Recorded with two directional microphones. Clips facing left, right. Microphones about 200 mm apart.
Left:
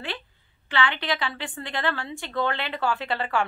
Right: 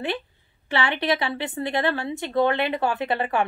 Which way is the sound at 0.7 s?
25° right (ahead or behind).